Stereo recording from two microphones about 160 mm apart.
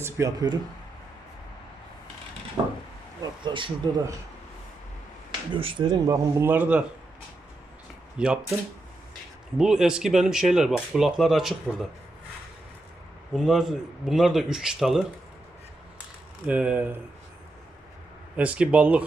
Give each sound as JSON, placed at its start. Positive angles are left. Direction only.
{"t": 0.0, "sound": "speech", "side_deg": -20}
{"t": 2.6, "sound": "a sound", "side_deg": -25}
{"t": 3.4, "sound": "speech", "side_deg": -30}
{"t": 5.5, "sound": "speech", "side_deg": -35}
{"t": 6.1, "sound": "a man's voice", "side_deg": -15}
{"t": 8.2, "sound": "speech", "side_deg": -5}
{"t": 9.6, "sound": "speech", "side_deg": -5}
{"t": 13.3, "sound": "speech", "side_deg": 0}
{"t": 16.5, "sound": "a man's voice", "side_deg": -10}
{"t": 18.3, "sound": "a man's voice", "side_deg": -10}